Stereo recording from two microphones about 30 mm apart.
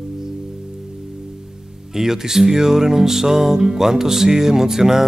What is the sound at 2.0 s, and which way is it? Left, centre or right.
Music, centre.